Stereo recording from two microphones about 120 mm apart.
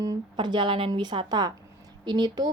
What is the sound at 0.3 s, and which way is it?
A woman's voice, 40° right (ahead or behind).